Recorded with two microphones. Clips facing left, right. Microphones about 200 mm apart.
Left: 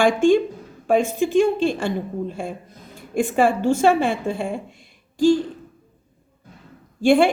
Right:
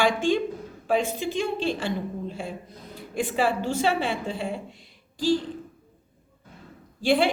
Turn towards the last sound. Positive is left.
turn(degrees=50)  # may be behind; listen again after turning